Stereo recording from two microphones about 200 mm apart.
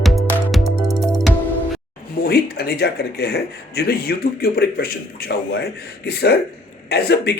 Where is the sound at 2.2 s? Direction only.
50° left (ahead or behind).